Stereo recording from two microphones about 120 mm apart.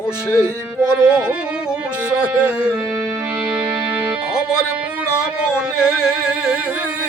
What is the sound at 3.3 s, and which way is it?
Music, 10° right (ahead or behind).